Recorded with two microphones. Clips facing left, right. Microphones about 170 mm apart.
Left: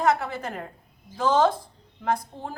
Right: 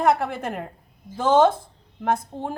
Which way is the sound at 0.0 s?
55° right (ahead or behind).